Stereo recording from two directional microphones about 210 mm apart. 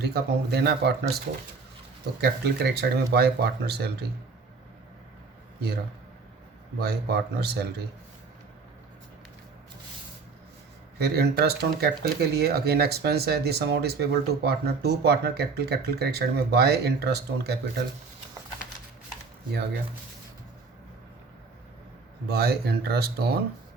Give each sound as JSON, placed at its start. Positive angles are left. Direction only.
{"t": 0.0, "sound": "speech", "side_deg": -50}
{"t": 2.2, "sound": "speech", "side_deg": -50}
{"t": 6.7, "sound": "speech", "side_deg": -50}
{"t": 10.9, "sound": "speech", "side_deg": -50}
{"t": 22.3, "sound": "speech", "side_deg": -50}